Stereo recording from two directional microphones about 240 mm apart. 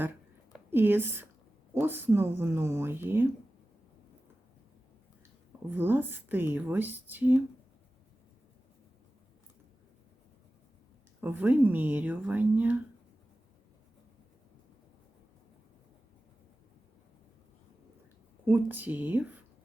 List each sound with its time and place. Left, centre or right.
0.5 s a woman's voice: centre
5.7 s speech: centre
11.2 s speech: centre
18.4 s speech: centre